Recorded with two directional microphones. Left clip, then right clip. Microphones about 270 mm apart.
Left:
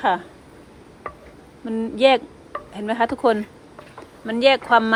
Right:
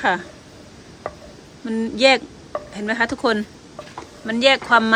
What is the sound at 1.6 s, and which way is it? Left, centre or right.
Speech, centre.